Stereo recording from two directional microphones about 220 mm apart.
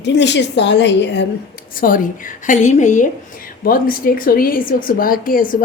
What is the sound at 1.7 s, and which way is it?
A woman's voice, 40° left (ahead or behind).